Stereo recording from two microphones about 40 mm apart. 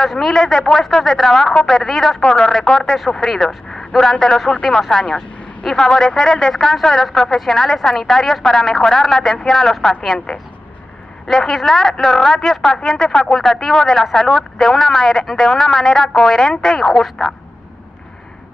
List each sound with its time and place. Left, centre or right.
0.0 s speech: centre
0.3 s speech: centre
5.0 s speech: left
5.7 s speech: centre
11.6 s speech: centre
16.8 s speech: centre